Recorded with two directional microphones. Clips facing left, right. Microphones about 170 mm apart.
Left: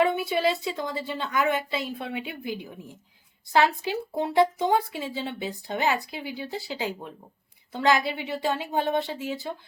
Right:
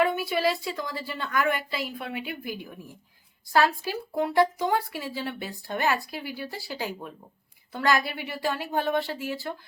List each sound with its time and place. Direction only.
0.0 s speech: 25° left (ahead or behind)